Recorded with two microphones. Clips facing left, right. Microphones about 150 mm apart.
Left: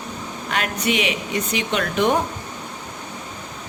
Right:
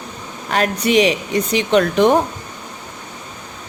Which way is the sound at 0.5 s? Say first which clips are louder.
Right 7 dB; 35° right (ahead or behind).